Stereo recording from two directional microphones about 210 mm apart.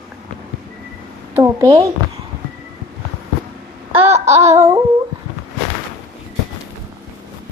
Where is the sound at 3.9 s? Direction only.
30° right (ahead or behind).